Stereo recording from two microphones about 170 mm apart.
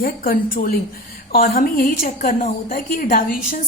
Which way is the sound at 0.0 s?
55° left (ahead or behind).